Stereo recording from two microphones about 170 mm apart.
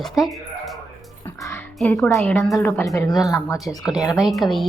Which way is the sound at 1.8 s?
10° left (ahead or behind).